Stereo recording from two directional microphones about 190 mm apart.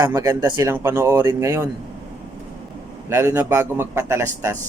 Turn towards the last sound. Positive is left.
turn(degrees=-15)  # may be behind; listen again after turning